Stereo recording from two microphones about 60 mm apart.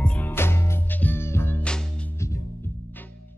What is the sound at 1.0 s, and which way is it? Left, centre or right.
Music, left.